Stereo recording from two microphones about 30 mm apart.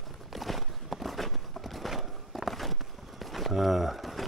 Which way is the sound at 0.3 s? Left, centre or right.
Centre.